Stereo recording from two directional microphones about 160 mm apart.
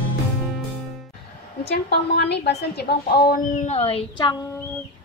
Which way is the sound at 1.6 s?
90° left.